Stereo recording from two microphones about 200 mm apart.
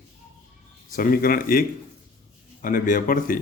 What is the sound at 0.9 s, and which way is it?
Speech, 45° left (ahead or behind).